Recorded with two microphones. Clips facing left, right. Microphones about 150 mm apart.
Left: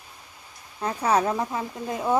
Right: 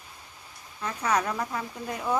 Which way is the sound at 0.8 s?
30° left (ahead or behind).